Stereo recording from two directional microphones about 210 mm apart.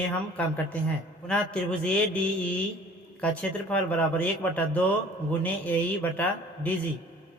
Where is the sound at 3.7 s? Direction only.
5° left (ahead or behind).